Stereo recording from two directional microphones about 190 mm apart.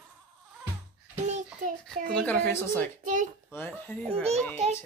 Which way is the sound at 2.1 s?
5° left (ahead or behind).